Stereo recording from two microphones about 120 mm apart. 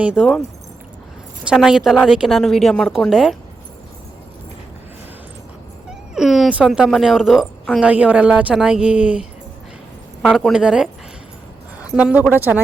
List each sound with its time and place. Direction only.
0.0 s a woman's voice: 10° right (ahead or behind)
1.5 s a woman's voice: 5° right (ahead or behind)
5.9 s a sound: 5° right (ahead or behind)
6.7 s a woman's voice: 5° right (ahead or behind)
10.2 s a woman's voice: 5° right (ahead or behind)